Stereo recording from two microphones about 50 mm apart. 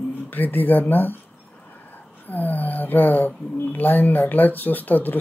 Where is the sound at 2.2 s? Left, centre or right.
Left.